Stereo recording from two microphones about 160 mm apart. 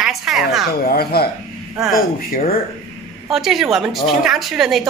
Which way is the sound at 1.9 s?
60° left (ahead or behind).